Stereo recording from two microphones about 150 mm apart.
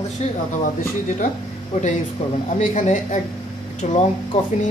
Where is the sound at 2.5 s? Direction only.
55° left (ahead or behind).